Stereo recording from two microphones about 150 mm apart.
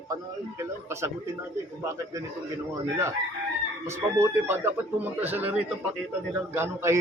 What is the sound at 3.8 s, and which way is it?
A man's voice, 15° right (ahead or behind).